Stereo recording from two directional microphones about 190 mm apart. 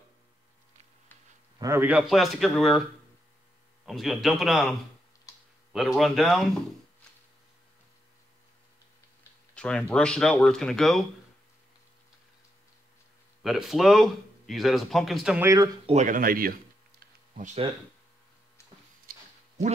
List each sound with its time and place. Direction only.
1.6 s speech: 10° right (ahead or behind)
3.8 s speech: centre (ahead or behind)
9.6 s speech: 5° left (ahead or behind)
13.4 s speech: centre (ahead or behind)
15.4 s speech: 15° right (ahead or behind)
15.9 s speech: 40° right (ahead or behind)